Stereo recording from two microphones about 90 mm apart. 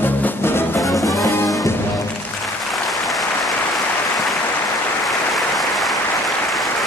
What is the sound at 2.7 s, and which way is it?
Applause, centre (ahead or behind).